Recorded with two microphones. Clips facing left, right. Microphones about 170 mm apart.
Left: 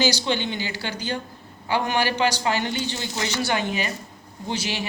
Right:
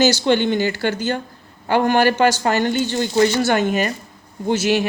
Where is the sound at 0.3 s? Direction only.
55° right (ahead or behind).